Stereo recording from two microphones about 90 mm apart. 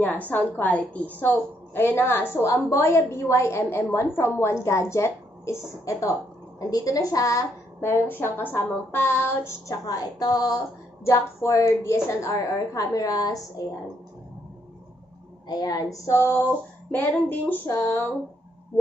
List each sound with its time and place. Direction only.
0.0 s a woman's voice: 20° left (ahead or behind); by 7.9 s 40° left (ahead or behind)
7.9 s a woman's voice: 25° left (ahead or behind); by 10.6 s 45° left (ahead or behind)
11.1 s a woman's voice: 35° left (ahead or behind)
15.4 s a woman's voice: 45° left (ahead or behind); by 18.0 s 25° left (ahead or behind)